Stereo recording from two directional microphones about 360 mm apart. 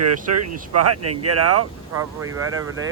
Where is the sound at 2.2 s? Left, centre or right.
Right.